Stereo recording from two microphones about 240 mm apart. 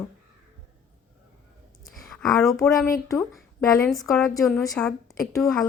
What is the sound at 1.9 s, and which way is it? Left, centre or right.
A woman's voice, centre.